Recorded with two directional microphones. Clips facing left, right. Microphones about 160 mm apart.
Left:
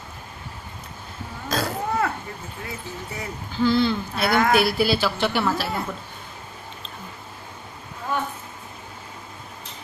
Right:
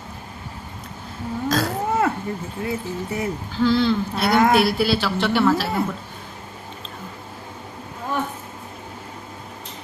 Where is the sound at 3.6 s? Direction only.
Centre (ahead or behind).